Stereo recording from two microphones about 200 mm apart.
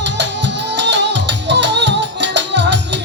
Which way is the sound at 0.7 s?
60° right (ahead or behind).